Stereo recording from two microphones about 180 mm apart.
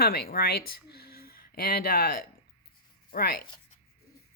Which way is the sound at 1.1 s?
55° left (ahead or behind).